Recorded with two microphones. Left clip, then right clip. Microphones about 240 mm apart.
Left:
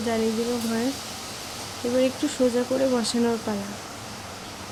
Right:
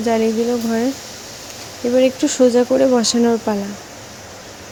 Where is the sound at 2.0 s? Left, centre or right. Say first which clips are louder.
Right 9 dB; right.